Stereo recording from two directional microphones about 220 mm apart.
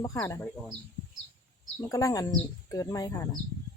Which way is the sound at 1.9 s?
15° left (ahead or behind).